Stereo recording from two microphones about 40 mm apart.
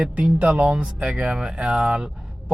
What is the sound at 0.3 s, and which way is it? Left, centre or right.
Speech, right.